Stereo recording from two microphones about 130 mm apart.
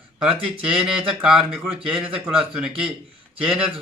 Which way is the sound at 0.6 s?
5° right (ahead or behind).